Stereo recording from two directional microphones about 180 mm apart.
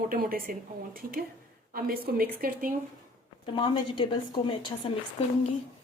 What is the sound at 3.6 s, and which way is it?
Speech, 25° left (ahead or behind).